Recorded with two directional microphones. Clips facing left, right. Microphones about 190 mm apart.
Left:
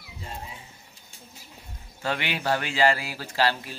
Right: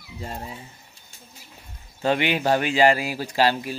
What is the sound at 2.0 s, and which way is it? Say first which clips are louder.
Speech: right 7 dB; 20° right (ahead or behind).